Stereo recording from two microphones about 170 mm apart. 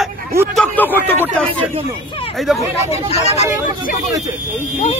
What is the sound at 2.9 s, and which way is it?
Speech, 40° left (ahead or behind).